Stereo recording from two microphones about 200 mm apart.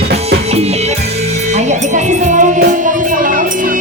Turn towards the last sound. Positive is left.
turn(degrees=-40)  # may be behind; listen again after turning